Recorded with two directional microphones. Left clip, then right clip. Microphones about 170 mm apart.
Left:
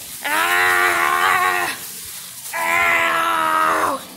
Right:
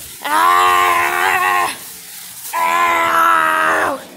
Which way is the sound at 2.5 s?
30° right (ahead or behind).